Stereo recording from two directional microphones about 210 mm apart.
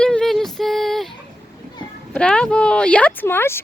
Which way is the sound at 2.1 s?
5° left (ahead or behind).